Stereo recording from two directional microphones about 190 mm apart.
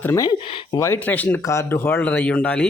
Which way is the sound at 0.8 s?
10° left (ahead or behind).